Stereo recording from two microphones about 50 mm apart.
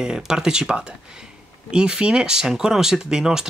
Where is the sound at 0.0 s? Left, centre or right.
Centre.